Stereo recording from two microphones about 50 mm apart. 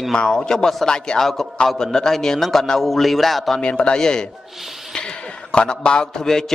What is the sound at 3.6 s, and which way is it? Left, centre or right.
A man's voice, centre.